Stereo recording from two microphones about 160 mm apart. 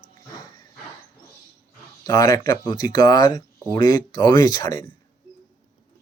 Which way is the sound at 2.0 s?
20° left (ahead or behind).